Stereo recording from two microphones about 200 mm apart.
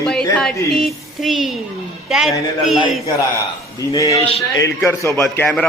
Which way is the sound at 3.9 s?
15° left (ahead or behind).